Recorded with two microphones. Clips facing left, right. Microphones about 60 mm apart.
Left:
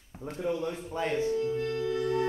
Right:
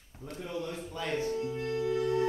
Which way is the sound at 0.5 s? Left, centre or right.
Left.